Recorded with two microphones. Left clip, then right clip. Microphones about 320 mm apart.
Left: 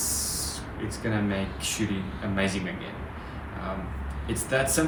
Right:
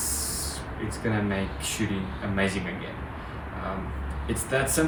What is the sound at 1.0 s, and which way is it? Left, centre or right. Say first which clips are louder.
Speech: right 1 dB; centre.